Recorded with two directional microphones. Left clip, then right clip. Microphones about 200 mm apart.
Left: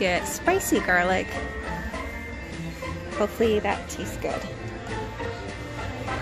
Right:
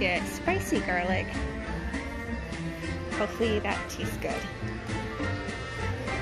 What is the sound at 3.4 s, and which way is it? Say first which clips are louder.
Speech: left 7 dB; 20° left (ahead or behind).